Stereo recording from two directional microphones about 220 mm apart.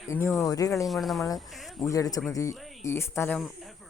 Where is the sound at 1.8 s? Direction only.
15° left (ahead or behind).